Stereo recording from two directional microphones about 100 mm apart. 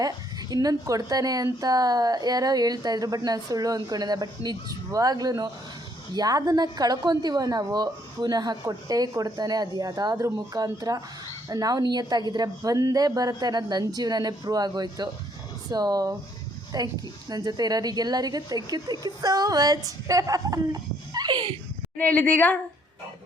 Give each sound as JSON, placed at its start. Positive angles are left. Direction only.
{"t": 0.0, "sound": "a woman's voice", "side_deg": -40}
{"t": 21.9, "sound": "a woman's voice", "side_deg": 15}